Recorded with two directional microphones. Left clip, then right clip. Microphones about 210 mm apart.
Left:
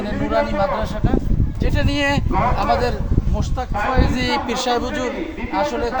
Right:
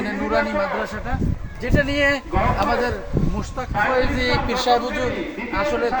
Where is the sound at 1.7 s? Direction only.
60° left (ahead or behind).